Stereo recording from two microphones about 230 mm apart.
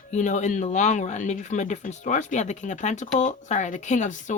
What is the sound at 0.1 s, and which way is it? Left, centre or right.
Speech, left.